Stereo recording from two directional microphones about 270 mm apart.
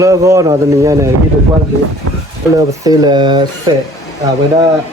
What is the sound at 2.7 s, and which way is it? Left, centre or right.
Speech, centre.